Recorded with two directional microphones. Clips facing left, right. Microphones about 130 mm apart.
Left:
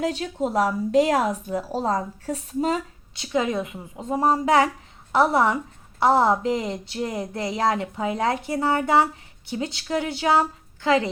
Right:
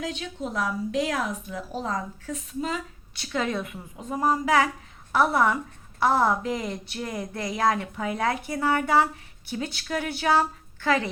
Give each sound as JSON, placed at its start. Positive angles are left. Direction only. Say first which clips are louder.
{"t": 0.0, "sound": "speech", "louder": "left 7 dB", "side_deg": 40}
{"t": 3.2, "sound": "speech", "louder": "left 4 dB", "side_deg": 20}